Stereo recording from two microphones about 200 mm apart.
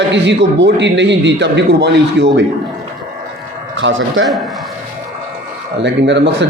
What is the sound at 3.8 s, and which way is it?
Speech, 75° right (ahead or behind).